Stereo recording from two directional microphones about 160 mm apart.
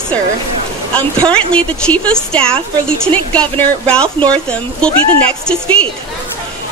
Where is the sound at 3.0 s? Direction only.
10° left (ahead or behind).